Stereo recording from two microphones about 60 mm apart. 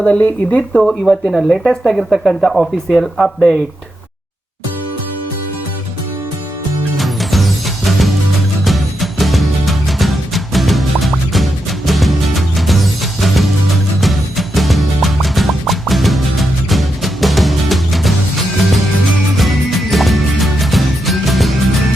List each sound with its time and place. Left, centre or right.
0.0 s speech: left
0.8 s speech: centre
6.9 s music: centre
19.4 s music: centre